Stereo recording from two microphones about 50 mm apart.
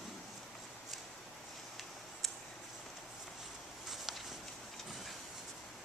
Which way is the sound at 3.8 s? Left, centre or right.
Centre.